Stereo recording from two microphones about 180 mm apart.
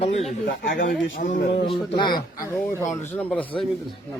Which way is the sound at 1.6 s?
25° left (ahead or behind).